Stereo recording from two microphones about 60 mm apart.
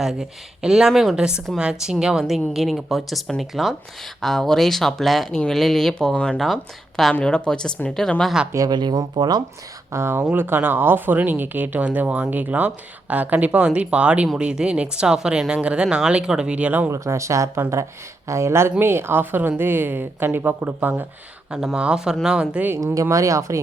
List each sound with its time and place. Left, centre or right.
0.0 s speech: centre
6.4 s speech: centre
7.1 s speech: centre
8.5 s speech: right
9.9 s a woman's voice: right
16.9 s a woman's voice: right
21.8 s speech: centre
23.0 s speech: right